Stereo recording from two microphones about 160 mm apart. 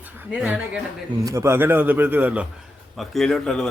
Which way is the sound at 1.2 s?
20° right (ahead or behind).